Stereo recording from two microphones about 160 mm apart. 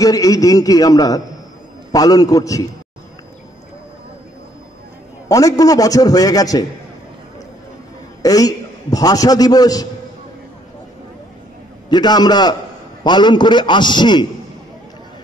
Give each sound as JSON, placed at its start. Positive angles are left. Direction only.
{"t": 0.0, "sound": "a man's voice", "side_deg": 20}
{"t": 5.3, "sound": "a man's voice", "side_deg": 20}
{"t": 8.2, "sound": "a man's voice", "side_deg": 25}
{"t": 11.9, "sound": "a man's voice", "side_deg": 25}